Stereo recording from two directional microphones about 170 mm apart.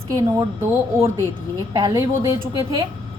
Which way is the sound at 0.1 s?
20° right (ahead or behind).